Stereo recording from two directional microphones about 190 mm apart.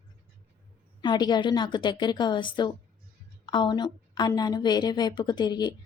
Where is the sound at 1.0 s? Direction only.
25° left (ahead or behind).